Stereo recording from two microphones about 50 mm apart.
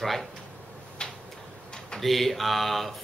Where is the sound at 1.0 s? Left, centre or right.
Centre.